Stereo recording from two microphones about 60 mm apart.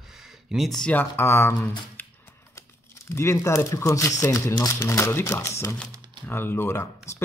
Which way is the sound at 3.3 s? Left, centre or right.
Left.